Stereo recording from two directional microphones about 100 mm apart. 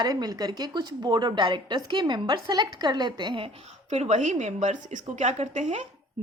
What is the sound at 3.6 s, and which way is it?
A woman's voice, 90° right.